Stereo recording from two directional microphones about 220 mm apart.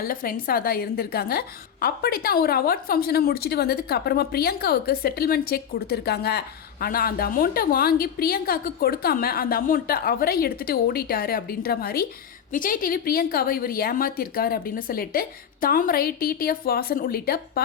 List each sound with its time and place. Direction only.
0.0 s a woman's voice: 40° left (ahead or behind)